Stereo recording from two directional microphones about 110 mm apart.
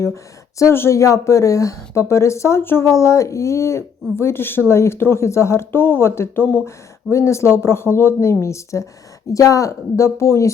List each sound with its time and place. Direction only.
0.6 s speech: 25° left (ahead or behind)